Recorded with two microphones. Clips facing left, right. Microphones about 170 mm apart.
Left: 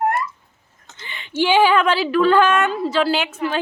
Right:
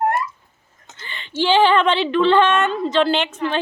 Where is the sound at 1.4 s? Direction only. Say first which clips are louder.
Even; 10° left (ahead or behind).